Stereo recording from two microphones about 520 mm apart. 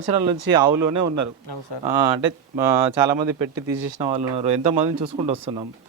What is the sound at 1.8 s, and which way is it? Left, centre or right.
Speech, right.